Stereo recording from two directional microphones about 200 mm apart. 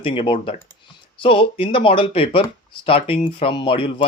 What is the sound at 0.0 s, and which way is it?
Speech, 25° left (ahead or behind).